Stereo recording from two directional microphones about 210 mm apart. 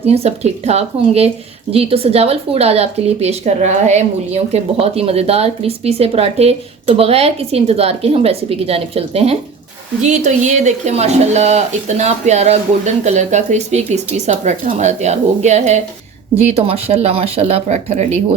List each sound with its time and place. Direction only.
0.0 s a woman's voice: 30° right (ahead or behind)